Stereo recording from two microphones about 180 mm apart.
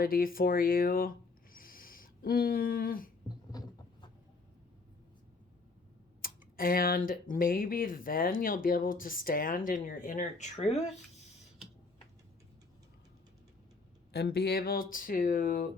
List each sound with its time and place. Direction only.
0.0 s speech: 50° left (ahead or behind)
1.5 s a sound: 55° left (ahead or behind)
6.2 s speech: 55° left (ahead or behind); by 10.9 s 35° left (ahead or behind)
14.1 s speech: 65° left (ahead or behind)